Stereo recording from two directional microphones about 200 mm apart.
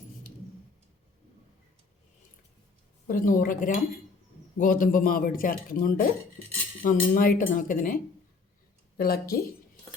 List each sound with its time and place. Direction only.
3.1 s speech: 45° left (ahead or behind)
9.0 s speech: 50° left (ahead or behind)